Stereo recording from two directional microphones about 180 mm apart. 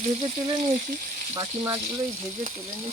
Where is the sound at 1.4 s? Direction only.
30° right (ahead or behind).